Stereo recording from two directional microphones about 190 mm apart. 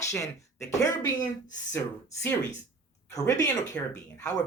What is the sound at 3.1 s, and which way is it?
Speech, 20° left (ahead or behind).